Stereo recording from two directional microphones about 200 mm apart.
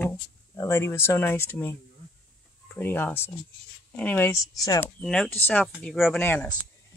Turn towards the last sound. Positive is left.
turn(degrees=10)  # may be behind; listen again after turning